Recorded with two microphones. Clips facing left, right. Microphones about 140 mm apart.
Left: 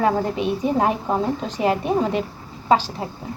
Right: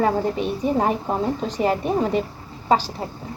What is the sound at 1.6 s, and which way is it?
Speech, 10° left (ahead or behind).